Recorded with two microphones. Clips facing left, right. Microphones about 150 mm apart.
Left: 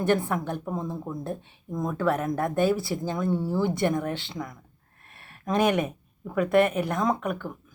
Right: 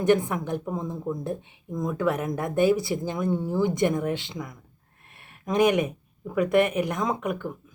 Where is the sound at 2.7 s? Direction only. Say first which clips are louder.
Right 1 dB; 20° right (ahead or behind).